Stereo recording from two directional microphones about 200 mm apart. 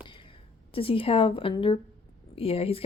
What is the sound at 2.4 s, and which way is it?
Speech, 30° left (ahead or behind).